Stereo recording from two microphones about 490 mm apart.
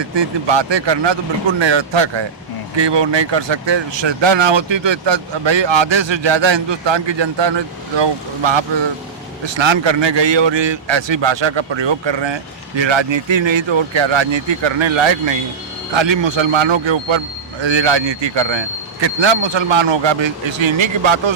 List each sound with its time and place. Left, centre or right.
0.0 s speech: right